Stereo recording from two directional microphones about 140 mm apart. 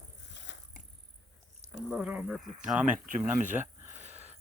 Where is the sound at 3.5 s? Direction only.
15° right (ahead or behind).